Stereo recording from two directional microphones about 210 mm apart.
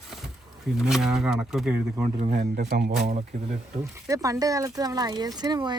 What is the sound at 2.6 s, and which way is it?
Speech, 50° right (ahead or behind).